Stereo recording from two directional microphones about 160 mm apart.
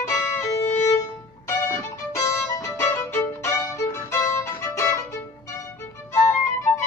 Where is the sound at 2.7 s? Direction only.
15° left (ahead or behind).